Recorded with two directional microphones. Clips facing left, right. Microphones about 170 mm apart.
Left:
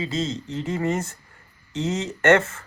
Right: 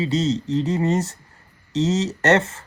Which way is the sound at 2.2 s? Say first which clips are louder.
Left 2 dB; 35° right (ahead or behind).